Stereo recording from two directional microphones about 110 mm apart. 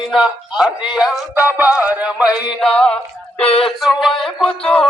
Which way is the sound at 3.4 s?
65° left (ahead or behind).